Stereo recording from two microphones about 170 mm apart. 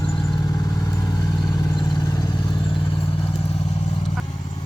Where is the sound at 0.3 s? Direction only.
20° left (ahead or behind).